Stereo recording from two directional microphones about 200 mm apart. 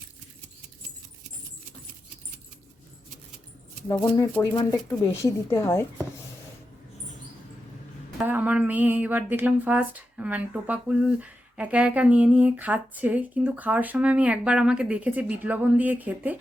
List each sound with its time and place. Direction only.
4.0 s speech: 15° left (ahead or behind)
8.2 s speech: 10° right (ahead or behind)